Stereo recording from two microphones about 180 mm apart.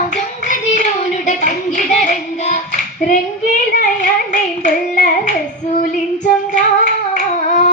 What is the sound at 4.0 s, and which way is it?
Hands, 45° left (ahead or behind).